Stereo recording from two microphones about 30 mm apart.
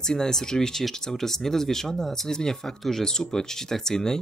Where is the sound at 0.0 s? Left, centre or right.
Centre.